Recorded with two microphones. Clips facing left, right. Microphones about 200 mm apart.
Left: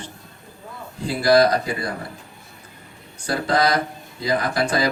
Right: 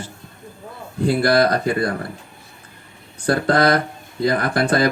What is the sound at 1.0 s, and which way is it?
Speech, 55° right (ahead or behind).